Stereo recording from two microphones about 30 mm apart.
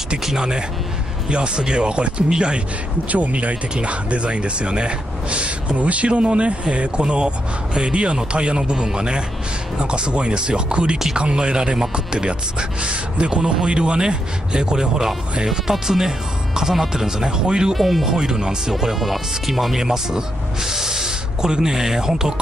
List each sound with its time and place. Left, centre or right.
0.4 s speech: right
3.1 s speech: right
5.8 s speech: right
15.4 s speech: centre
17.7 s speech: centre
18.0 s speech: centre
18.7 s speech: centre
19.8 s speech: centre